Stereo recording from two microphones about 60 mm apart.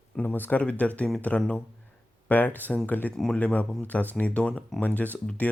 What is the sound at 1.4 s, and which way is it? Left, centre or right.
Speech, centre.